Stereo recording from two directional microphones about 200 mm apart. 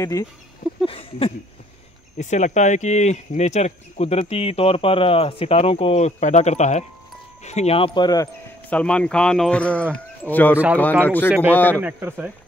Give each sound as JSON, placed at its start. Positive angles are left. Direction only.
{"t": 0.0, "sound": "speech", "side_deg": 15}
{"t": 0.8, "sound": "a sound", "side_deg": 30}
{"t": 2.1, "sound": "speech", "side_deg": 35}
{"t": 8.6, "sound": "speech", "side_deg": 5}
{"t": 11.2, "sound": "speech", "side_deg": -5}
{"t": 11.5, "sound": "speech", "side_deg": 10}
{"t": 11.8, "sound": "speech", "side_deg": -10}